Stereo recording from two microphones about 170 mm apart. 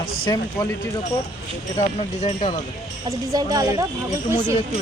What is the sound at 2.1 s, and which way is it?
Speech, 40° left (ahead or behind).